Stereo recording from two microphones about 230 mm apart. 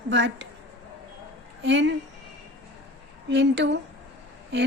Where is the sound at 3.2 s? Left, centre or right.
Right.